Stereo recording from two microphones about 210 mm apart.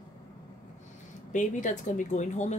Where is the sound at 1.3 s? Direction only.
35° left (ahead or behind).